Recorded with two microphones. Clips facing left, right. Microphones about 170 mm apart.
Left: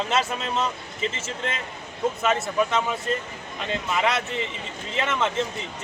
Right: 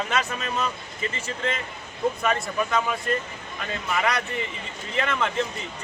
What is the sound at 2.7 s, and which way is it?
Speech, 20° left (ahead or behind).